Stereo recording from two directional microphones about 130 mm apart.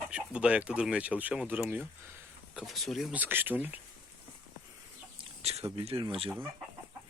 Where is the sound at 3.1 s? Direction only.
15° right (ahead or behind).